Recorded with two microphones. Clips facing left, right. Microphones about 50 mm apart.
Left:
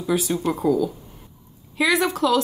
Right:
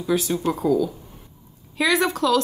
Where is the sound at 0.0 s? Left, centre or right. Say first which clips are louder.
Even; centre.